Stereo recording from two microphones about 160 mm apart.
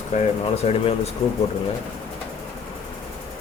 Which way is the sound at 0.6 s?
40° left (ahead or behind).